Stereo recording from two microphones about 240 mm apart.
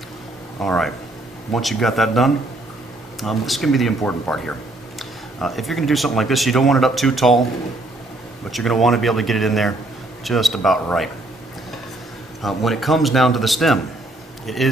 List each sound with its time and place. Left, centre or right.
0.6 s speech: centre
8.5 s speech: centre
12.4 s speech: centre